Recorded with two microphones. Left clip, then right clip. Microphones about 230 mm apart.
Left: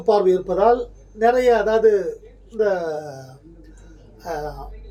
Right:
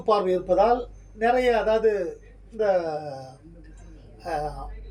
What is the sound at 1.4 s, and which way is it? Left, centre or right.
Speech, centre.